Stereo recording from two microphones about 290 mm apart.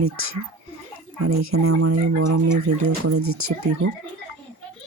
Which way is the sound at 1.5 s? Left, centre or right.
Right.